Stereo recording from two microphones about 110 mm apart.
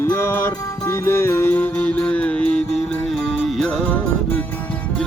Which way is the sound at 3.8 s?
15° left (ahead or behind).